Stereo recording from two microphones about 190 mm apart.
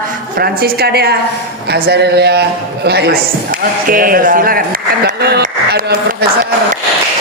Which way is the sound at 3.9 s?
50° right (ahead or behind).